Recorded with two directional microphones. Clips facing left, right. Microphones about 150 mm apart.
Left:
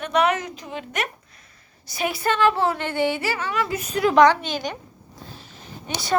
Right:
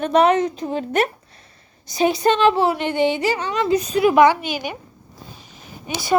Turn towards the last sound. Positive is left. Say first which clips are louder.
# right 4 dB
turn(degrees=-10)  # may be behind; listen again after turning